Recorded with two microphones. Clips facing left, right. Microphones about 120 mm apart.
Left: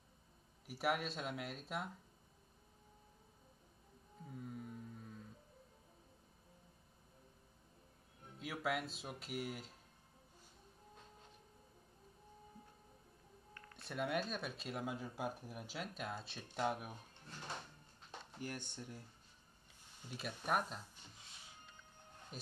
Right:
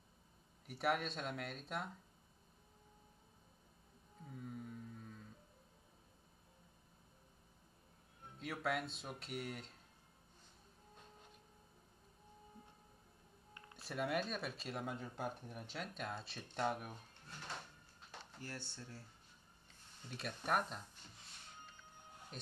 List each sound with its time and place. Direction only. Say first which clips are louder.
0.7 s speech: even; centre (ahead or behind)
4.3 s music: even; centre (ahead or behind)
8.4 s speech: even; centre (ahead or behind)
13.7 s speech: even; centre (ahead or behind)
18.4 s speech: left 4 dB; 15° left (ahead or behind)
20.0 s speech: even; 5° left (ahead or behind)
22.3 s speech: left 1 dB; 5° left (ahead or behind)